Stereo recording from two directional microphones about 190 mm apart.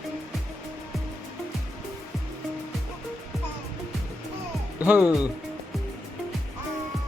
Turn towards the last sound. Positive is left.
turn(degrees=-5)  # may be behind; listen again after turning